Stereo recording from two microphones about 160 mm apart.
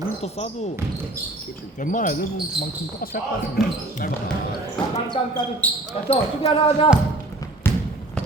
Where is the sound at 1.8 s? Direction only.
55° left (ahead or behind).